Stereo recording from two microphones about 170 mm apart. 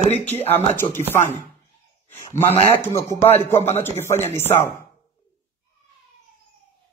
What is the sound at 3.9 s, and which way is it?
Speech, 15° left (ahead or behind).